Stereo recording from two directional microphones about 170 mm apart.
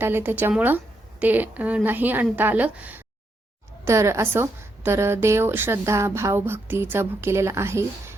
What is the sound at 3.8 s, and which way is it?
Speech, 15° right (ahead or behind).